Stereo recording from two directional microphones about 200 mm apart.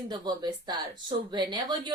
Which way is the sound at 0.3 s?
20° right (ahead or behind).